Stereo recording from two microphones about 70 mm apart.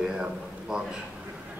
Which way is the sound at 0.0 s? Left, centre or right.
Centre.